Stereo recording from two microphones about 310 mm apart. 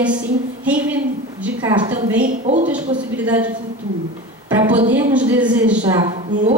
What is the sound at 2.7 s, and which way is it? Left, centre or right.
Speech, centre.